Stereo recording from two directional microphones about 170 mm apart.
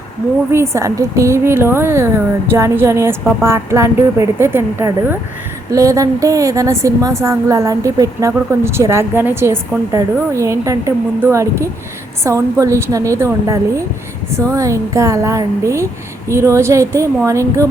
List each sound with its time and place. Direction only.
0.5 s a woman's voice: 15° right (ahead or behind)